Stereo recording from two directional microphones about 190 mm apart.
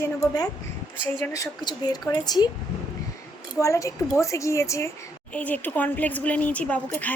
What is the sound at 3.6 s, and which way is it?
Speech, 15° left (ahead or behind).